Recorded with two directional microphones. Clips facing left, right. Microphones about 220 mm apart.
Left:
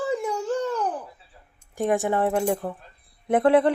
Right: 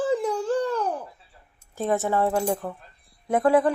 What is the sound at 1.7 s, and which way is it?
Speech, 15° left (ahead or behind).